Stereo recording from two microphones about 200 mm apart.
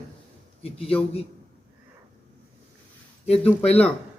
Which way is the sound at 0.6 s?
30° left (ahead or behind).